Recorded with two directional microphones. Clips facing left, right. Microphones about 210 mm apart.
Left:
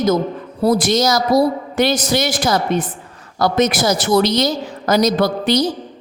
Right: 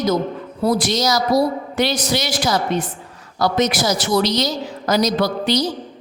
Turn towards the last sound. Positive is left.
turn(degrees=50)  # may be behind; listen again after turning